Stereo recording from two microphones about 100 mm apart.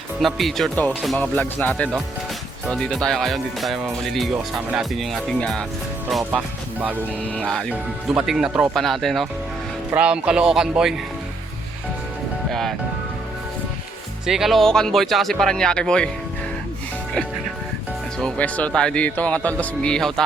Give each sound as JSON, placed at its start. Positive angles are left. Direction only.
{"t": 0.2, "sound": "speech", "side_deg": 0}
{"t": 1.2, "sound": "speech", "side_deg": 15}
{"t": 2.7, "sound": "speech", "side_deg": 5}
{"t": 6.3, "sound": "speech", "side_deg": -15}
{"t": 7.7, "sound": "speech", "side_deg": -5}
{"t": 8.7, "sound": "speech", "side_deg": 5}
{"t": 9.9, "sound": "speech", "side_deg": -10}
{"t": 12.5, "sound": "music", "side_deg": 5}
{"t": 14.3, "sound": "speech", "side_deg": -5}
{"t": 18.2, "sound": "speech", "side_deg": 10}